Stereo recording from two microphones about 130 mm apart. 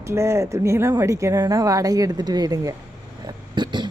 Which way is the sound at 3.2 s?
30° right (ahead or behind).